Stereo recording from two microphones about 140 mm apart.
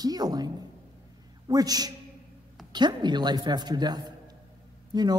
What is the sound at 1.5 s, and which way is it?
A man's voice, 25° right (ahead or behind).